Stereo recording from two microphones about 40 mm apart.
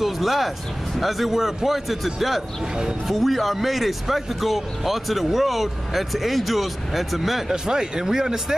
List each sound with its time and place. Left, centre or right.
0.0 s music: centre
0.9 s speech: centre
7.5 s speech: centre